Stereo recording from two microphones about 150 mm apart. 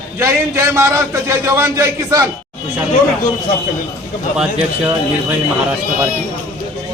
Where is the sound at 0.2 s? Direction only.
20° right (ahead or behind).